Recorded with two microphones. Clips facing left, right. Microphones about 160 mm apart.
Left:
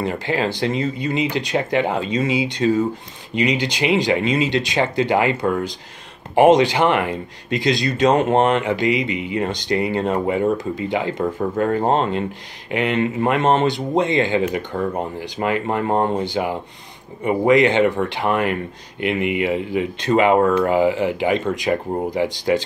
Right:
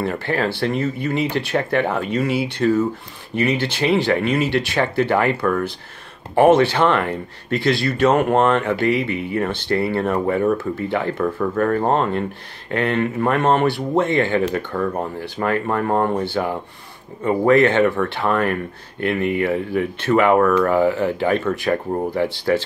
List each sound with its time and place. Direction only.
0.0 s speech: 15° left (ahead or behind)